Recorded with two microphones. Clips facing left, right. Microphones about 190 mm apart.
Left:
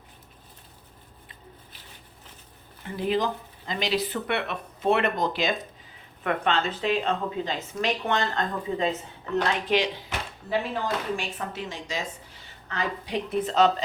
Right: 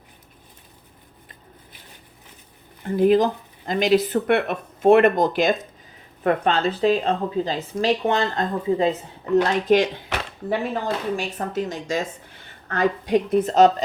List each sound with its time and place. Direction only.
2.8 s speech: 50° right (ahead or behind)